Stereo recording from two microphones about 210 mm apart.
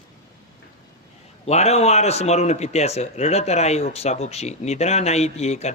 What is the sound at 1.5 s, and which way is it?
Speech, 30° left (ahead or behind).